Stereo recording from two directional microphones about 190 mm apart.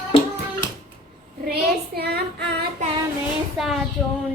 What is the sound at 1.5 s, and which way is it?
Child singing, 55° right (ahead or behind).